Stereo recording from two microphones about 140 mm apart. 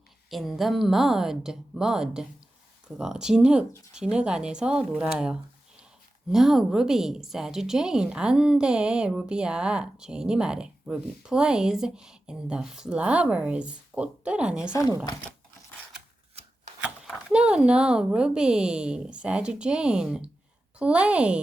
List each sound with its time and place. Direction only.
0.3 s a woman's voice: centre (ahead or behind)
14.7 s speech: 25° left (ahead or behind)
17.3 s a woman's voice: 5° right (ahead or behind)